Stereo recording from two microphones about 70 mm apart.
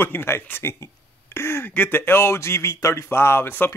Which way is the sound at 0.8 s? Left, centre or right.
Left.